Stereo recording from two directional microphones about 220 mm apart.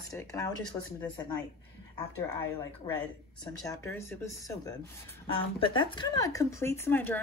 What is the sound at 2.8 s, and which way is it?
A woman's voice, 15° left (ahead or behind).